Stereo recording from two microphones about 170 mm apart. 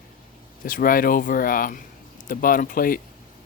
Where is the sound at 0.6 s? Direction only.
55° left (ahead or behind).